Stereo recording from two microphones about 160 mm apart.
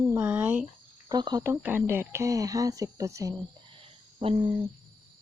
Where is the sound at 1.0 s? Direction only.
25° right (ahead or behind).